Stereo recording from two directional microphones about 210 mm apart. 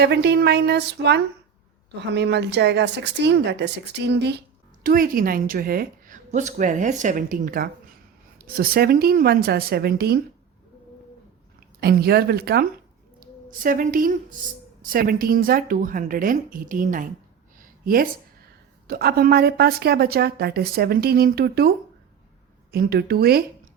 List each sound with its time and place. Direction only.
0.0 s a woman's voice: 50° right (ahead or behind)
4.8 s a woman's voice: 40° right (ahead or behind)
11.8 s a woman's voice: 50° right (ahead or behind)
17.6 s a sound: 40° right (ahead or behind)
18.9 s a woman's voice: 45° right (ahead or behind)
22.7 s a woman's voice: 50° right (ahead or behind)